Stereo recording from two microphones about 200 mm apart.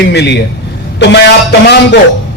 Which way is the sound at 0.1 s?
60° left (ahead or behind).